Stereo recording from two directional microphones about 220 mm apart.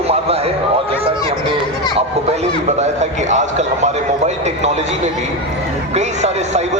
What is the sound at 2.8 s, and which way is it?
Speech, 30° right (ahead or behind).